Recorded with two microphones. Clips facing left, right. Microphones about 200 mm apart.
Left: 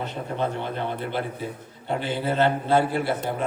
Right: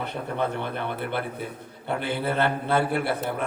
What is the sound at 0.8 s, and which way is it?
Speech, 20° left (ahead or behind).